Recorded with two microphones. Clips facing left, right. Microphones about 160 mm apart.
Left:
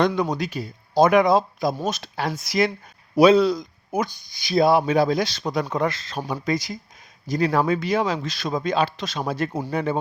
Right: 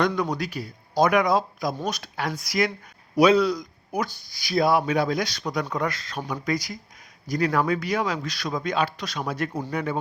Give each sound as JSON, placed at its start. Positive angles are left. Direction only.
{"t": 0.2, "sound": "speech", "side_deg": 20}